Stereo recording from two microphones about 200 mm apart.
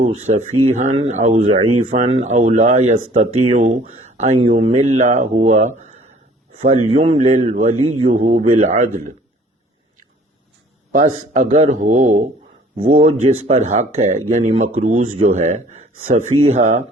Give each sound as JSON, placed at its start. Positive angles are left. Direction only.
{"t": 0.0, "sound": "speech", "side_deg": -35}
{"t": 10.9, "sound": "speech", "side_deg": -35}
{"t": 14.9, "sound": "speech", "side_deg": -90}
{"t": 15.4, "sound": "speech", "side_deg": -35}